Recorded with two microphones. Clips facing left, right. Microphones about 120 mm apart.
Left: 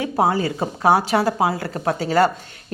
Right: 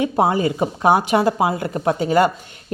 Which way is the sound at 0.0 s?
20° right (ahead or behind).